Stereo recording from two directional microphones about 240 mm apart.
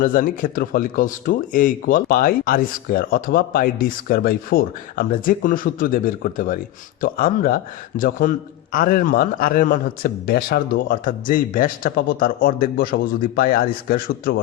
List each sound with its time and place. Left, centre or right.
0.0 s a man's voice: left